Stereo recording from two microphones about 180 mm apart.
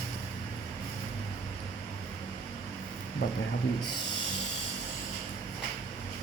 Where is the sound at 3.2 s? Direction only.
65° left (ahead or behind).